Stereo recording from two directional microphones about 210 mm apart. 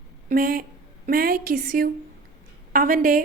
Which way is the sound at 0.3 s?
45° right (ahead or behind).